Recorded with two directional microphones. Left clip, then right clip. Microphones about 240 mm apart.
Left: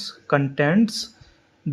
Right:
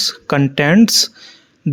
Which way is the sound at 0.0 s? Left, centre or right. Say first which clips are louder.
Right 6 dB; right.